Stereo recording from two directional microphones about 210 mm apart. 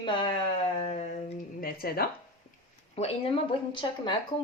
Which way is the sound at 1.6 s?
45° left (ahead or behind).